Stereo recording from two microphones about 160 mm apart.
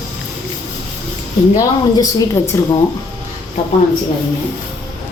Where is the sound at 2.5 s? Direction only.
20° left (ahead or behind).